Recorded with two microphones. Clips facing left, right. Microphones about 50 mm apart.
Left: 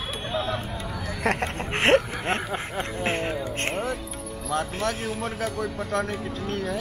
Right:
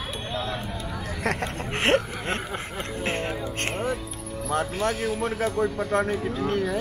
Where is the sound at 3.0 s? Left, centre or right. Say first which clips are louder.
Left 1 dB; centre.